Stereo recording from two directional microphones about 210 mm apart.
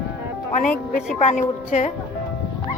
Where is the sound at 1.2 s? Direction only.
35° left (ahead or behind).